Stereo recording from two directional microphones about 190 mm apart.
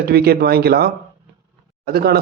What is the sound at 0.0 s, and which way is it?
Speech, 55° right (ahead or behind).